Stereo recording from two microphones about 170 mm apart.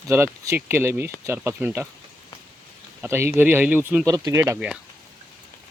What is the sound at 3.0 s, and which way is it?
Speech, 15° right (ahead or behind).